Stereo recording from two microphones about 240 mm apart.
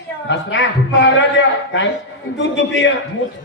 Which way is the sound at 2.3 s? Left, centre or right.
Left.